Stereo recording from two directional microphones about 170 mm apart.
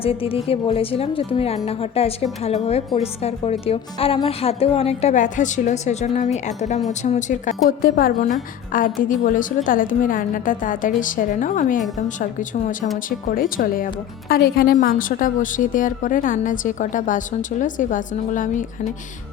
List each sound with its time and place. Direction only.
0.0 s speech: 35° left (ahead or behind)
7.8 s a woman's voice: 60° left (ahead or behind)